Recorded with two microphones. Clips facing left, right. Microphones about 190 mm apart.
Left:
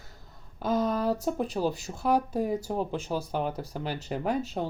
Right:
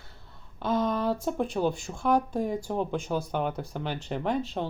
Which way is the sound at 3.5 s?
35° left (ahead or behind).